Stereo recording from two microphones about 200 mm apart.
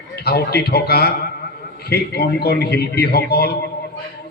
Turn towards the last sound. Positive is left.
turn(degrees=55)  # may be behind; listen again after turning